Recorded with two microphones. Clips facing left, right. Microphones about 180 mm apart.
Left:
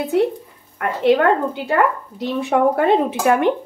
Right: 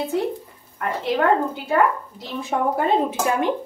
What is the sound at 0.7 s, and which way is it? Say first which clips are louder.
Speech: left 7 dB; 70° left (ahead or behind).